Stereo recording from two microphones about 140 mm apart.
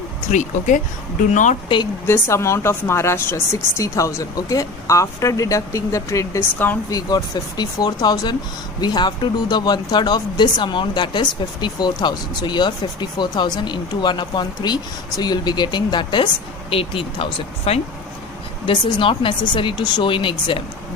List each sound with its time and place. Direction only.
0.3 s speech: 65° left (ahead or behind)
2.0 s speech: 20° left (ahead or behind)
6.9 s speech: 30° left (ahead or behind); by 17.8 s 50° left (ahead or behind)
18.6 s speech: 35° left (ahead or behind)